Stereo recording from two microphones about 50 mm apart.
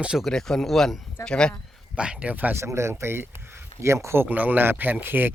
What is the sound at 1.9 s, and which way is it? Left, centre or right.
Speech, centre.